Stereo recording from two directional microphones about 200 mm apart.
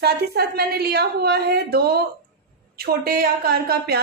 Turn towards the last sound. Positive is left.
turn(degrees=-50)  # may be behind; listen again after turning